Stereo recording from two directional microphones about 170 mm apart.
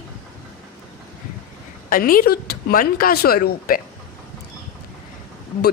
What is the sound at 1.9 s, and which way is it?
Speech, 55° left (ahead or behind).